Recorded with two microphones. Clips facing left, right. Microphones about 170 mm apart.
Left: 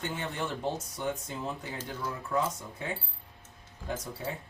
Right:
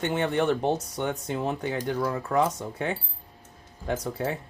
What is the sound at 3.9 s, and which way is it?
Speech, 85° right.